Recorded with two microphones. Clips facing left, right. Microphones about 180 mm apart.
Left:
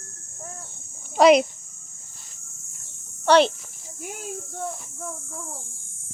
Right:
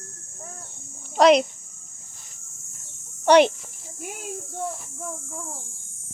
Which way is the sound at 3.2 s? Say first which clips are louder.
Right 2 dB; 15° right (ahead or behind).